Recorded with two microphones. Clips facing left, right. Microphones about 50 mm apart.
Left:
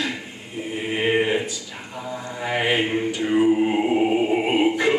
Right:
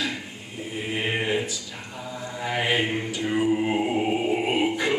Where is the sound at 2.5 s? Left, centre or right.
Centre.